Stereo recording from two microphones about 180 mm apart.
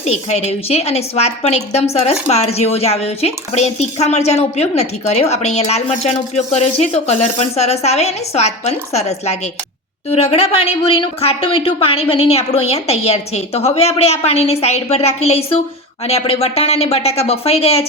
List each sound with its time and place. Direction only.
0.0 s a woman's voice: 40° left (ahead or behind)